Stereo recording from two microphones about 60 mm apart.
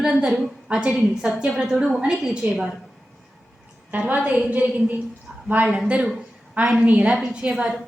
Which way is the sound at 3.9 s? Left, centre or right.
Right.